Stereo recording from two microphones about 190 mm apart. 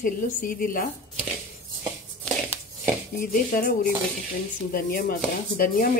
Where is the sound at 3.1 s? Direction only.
50° left (ahead or behind).